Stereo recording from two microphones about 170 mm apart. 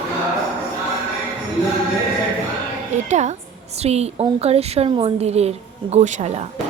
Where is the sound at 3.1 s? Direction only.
45° right (ahead or behind).